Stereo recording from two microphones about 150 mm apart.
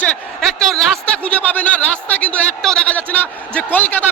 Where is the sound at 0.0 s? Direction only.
5° left (ahead or behind).